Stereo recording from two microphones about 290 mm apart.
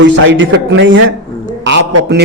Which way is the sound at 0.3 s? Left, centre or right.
Right.